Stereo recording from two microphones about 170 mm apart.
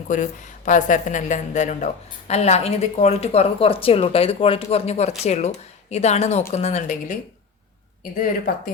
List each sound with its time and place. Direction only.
0.1 s a woman's voice: 50° left (ahead or behind)